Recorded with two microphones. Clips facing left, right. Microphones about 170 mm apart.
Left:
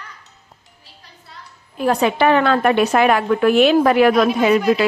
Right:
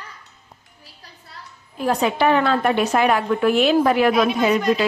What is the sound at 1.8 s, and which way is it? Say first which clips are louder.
A woman's voice: left 3 dB; 70° left (ahead or behind).